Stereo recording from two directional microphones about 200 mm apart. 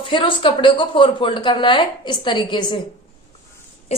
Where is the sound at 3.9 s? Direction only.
30° left (ahead or behind).